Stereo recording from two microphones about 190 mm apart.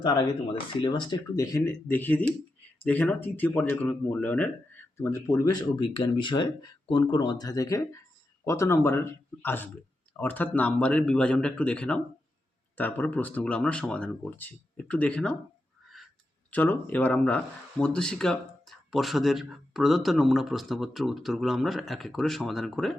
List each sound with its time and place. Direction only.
0.0 s speech: 25° left (ahead or behind); by 15.4 s 5° left (ahead or behind)
15.9 s a sound: centre (ahead or behind)
16.5 s speech: 10° left (ahead or behind)